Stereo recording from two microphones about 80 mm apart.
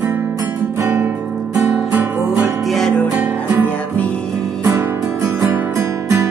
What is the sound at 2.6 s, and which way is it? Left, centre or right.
Music, centre.